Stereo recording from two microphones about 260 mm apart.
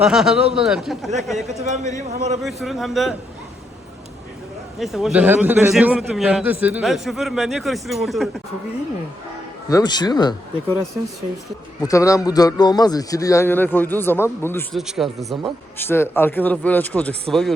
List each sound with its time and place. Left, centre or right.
0.0 s a man's voice: centre
1.6 s a man's voice: right
2.4 s a man's voice: centre
4.8 s a man's voice: centre
9.6 s a man's voice: centre
11.8 s a man's voice: centre